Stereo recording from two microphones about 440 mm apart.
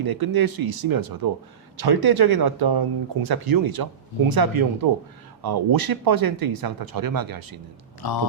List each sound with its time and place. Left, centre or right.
0.0 s speech: right
8.0 s speech: left